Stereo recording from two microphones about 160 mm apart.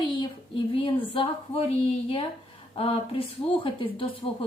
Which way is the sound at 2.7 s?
35° left (ahead or behind).